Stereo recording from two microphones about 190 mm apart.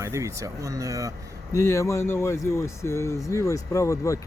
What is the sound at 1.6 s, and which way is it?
Speech, 15° left (ahead or behind).